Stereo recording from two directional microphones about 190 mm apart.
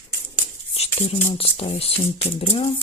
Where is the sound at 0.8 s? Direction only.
35° left (ahead or behind).